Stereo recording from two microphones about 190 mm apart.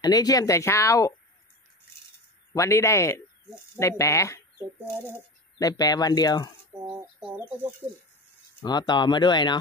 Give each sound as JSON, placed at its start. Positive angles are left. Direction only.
{"t": 0.0, "sound": "speech", "side_deg": 20}
{"t": 2.5, "sound": "speech", "side_deg": 15}
{"t": 6.7, "sound": "a sound", "side_deg": -10}
{"t": 7.2, "sound": "speech", "side_deg": -5}
{"t": 8.6, "sound": "speech", "side_deg": 20}